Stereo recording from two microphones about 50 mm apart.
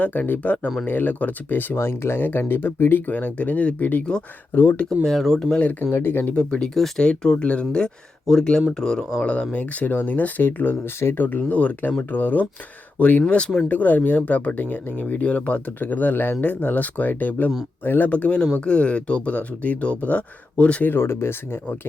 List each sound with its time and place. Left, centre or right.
0.0 s speech: left
1.8 s speech: left
3.1 s speech: left
5.0 s speech: centre
5.5 s speech: left
5.9 s speech: left
6.3 s speech: centre
6.7 s speech: centre
7.0 s speech: centre
9.2 s speech: left
20.8 s speech: left